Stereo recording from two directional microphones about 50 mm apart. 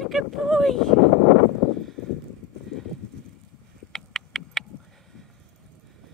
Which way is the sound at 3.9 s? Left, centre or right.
Centre.